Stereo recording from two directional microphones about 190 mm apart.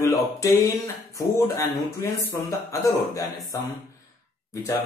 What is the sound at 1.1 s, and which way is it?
Speech, 15° left (ahead or behind).